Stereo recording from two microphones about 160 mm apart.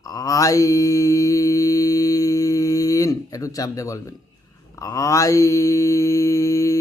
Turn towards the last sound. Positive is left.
turn(degrees=20)  # may be behind; listen again after turning